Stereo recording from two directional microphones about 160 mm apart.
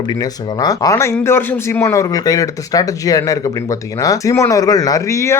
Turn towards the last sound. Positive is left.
turn(degrees=20)  # may be behind; listen again after turning